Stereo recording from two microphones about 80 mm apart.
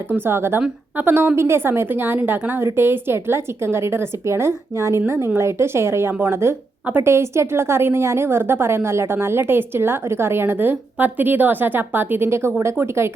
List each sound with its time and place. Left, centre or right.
0.1 s a woman's voice: right